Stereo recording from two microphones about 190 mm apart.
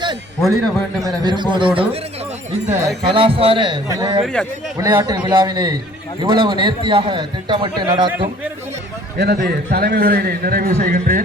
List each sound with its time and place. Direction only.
1.0 s a man's voice: 25° right (ahead or behind)
4.2 s a man's voice: 5° left (ahead or behind)
4.8 s a man's voice: 20° right (ahead or behind)
9.1 s a man's voice: 55° right (ahead or behind)